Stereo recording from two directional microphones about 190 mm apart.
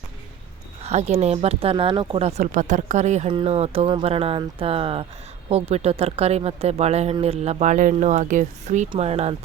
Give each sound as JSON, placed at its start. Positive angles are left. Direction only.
{"t": 0.8, "sound": "speech", "side_deg": -35}